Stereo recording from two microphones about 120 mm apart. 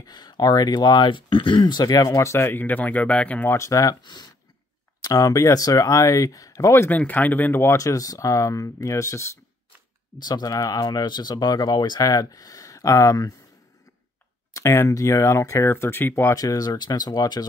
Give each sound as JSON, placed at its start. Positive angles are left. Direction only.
{"t": 0.0, "sound": "speech", "side_deg": 35}
{"t": 3.5, "sound": "speech", "side_deg": 25}
{"t": 10.1, "sound": "speech", "side_deg": 35}
{"t": 14.5, "sound": "speech", "side_deg": 25}